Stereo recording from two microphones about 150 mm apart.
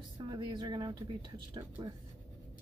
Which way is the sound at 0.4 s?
30° right (ahead or behind).